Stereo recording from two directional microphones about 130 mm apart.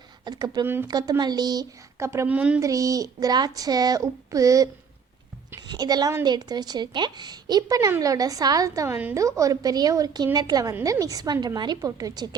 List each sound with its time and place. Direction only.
0.3 s speech: 30° right (ahead or behind)
0.6 s speech: 15° right (ahead or behind)
0.9 s a woman's voice: 30° right (ahead or behind); by 2.6 s 10° right (ahead or behind)
2.6 s a woman's voice: 25° right (ahead or behind)